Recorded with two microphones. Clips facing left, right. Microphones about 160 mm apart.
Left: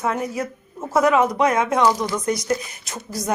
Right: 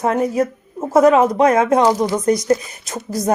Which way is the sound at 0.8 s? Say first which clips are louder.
Right 5 dB; 30° right (ahead or behind).